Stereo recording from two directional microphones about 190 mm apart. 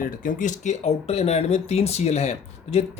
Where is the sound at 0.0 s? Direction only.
45° left (ahead or behind).